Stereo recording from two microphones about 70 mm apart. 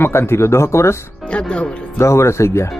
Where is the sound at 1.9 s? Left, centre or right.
Left.